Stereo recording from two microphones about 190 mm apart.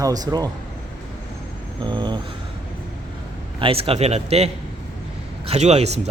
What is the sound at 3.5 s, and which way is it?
Speech, 30° right (ahead or behind).